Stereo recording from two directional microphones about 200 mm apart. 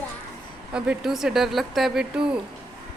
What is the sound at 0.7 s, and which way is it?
Speech, 5° right (ahead or behind).